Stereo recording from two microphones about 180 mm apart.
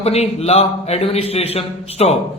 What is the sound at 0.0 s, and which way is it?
A man's voice, 35° left (ahead or behind).